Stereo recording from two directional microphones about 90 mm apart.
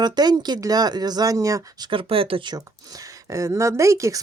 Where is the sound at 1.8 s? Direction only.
75° right (ahead or behind).